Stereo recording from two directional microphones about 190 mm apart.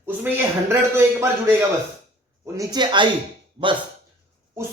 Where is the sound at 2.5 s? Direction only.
20° right (ahead or behind).